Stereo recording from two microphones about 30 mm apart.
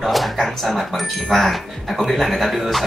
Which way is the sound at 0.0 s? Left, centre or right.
Centre.